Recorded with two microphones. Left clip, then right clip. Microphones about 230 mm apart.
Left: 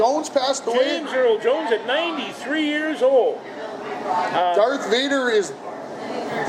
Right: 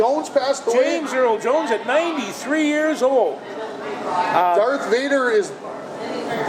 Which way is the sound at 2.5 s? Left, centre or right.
Right.